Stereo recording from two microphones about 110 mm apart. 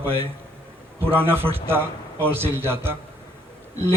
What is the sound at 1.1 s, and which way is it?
A man's voice, 20° right (ahead or behind).